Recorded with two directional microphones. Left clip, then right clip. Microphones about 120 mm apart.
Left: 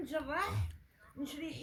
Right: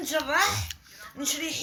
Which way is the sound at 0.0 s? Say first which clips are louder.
Right 12 dB; 10° right (ahead or behind).